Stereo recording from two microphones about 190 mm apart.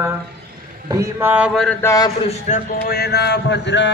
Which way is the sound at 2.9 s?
60° left (ahead or behind).